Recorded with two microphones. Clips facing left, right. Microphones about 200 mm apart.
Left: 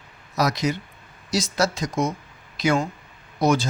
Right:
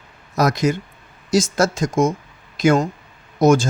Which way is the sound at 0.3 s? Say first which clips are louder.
Right 5 dB; 50° right (ahead or behind).